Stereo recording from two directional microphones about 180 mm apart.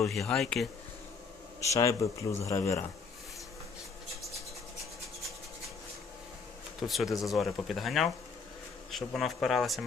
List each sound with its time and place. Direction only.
0.0 s speech: centre (ahead or behind)
1.6 s speech: 15° left (ahead or behind)
6.7 s speech: centre (ahead or behind)